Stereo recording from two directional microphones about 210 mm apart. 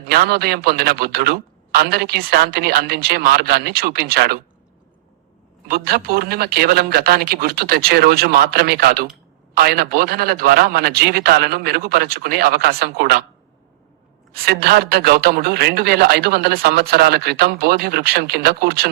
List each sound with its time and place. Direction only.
0.1 s a man's voice: 50° right (ahead or behind)
5.6 s a man's voice: 50° right (ahead or behind)
14.3 s a man's voice: 50° right (ahead or behind)